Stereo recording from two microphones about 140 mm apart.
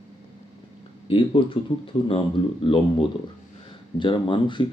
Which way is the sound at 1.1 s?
40° left (ahead or behind).